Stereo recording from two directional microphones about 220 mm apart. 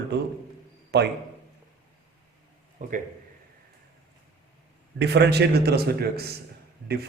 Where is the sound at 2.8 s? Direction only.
35° right (ahead or behind).